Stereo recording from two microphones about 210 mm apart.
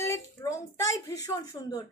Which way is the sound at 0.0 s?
15° left (ahead or behind).